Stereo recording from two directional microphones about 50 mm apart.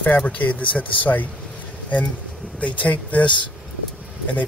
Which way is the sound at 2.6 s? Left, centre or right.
Left.